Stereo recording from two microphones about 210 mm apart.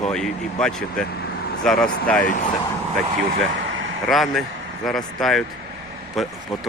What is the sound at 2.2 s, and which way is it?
Speech, 35° left (ahead or behind).